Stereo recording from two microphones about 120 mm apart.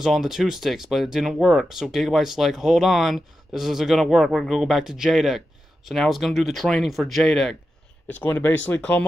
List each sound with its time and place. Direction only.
0.0 s speech: centre (ahead or behind)
8.1 s speech: 15° left (ahead or behind)